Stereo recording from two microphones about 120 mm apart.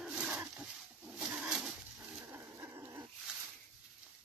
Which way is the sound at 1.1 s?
5° right (ahead or behind).